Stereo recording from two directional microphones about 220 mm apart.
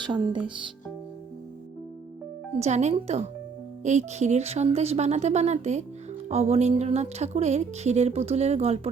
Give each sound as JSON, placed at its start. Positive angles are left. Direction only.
{"t": 0.0, "sound": "speech", "side_deg": -20}
{"t": 2.6, "sound": "speech", "side_deg": -30}